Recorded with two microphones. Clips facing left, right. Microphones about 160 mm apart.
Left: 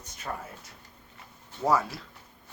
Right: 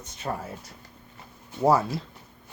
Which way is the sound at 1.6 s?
30° right (ahead or behind).